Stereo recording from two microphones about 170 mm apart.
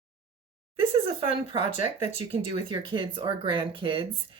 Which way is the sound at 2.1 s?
35° right (ahead or behind).